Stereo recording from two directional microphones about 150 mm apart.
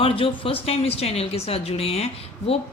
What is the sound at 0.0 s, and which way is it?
A woman's voice, 40° left (ahead or behind).